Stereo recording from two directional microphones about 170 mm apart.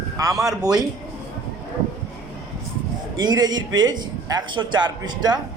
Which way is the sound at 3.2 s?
25° right (ahead or behind).